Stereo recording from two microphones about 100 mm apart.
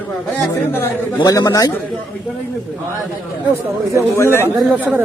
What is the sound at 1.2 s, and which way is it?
Speech, 35° left (ahead or behind).